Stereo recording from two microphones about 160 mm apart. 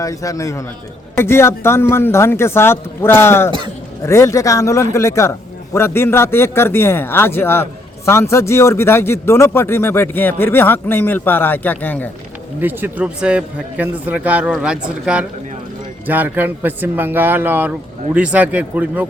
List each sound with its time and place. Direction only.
0.0 s a man's voice: 20° left (ahead or behind)
12.6 s a man's voice: 10° right (ahead or behind)